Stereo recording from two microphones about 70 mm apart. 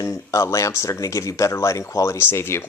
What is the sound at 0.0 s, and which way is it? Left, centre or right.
Speech, left.